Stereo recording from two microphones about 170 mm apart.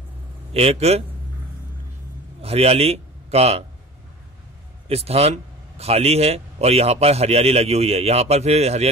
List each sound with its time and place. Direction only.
0.5 s speech: 35° right (ahead or behind)
2.4 s a man's voice: 35° right (ahead or behind)
4.8 s speech: 35° right (ahead or behind)